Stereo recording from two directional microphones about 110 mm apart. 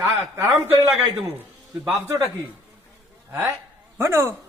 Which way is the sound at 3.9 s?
25° right (ahead or behind).